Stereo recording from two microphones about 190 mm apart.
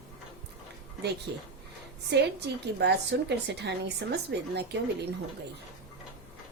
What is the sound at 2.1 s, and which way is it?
Speech, 65° right (ahead or behind).